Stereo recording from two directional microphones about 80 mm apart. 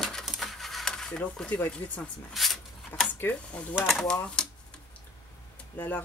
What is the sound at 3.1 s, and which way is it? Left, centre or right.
Speech, left.